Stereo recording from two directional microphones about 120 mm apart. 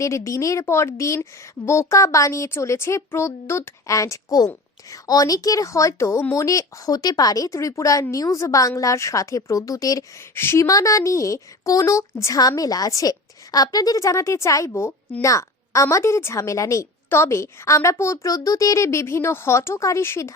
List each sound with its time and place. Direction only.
0.0 s a woman's voice: 25° left (ahead or behind)